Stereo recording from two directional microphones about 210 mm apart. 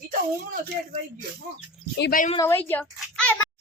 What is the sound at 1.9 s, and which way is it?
Speech, 50° left (ahead or behind).